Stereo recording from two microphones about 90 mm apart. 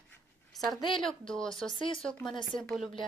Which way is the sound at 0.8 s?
60° left (ahead or behind).